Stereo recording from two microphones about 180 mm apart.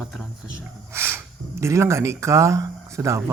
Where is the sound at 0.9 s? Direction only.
10° right (ahead or behind).